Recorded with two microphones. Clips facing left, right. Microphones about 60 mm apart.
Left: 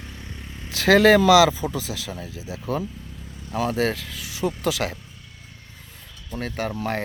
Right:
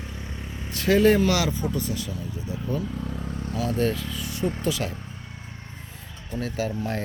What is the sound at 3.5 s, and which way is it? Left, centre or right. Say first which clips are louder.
Speech: left 2 dB; left.